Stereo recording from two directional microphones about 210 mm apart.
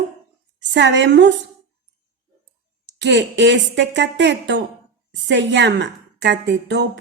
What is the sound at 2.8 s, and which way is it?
A woman's voice, 55° right (ahead or behind).